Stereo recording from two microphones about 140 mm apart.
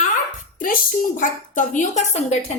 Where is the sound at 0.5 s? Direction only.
75° left (ahead or behind).